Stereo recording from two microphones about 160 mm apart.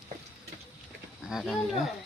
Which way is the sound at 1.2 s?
Centre (ahead or behind).